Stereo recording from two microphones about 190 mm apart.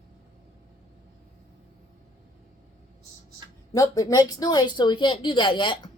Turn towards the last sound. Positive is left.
turn(degrees=25)  # may be behind; listen again after turning